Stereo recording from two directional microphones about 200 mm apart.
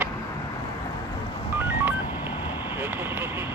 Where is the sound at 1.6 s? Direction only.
10° right (ahead or behind).